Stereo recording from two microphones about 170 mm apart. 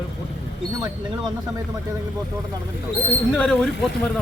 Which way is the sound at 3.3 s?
5° left (ahead or behind).